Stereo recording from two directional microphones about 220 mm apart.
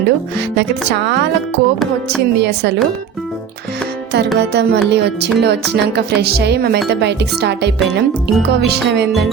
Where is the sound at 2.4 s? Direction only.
50° right (ahead or behind).